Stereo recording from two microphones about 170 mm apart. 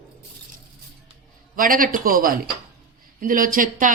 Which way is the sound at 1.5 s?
55° right (ahead or behind).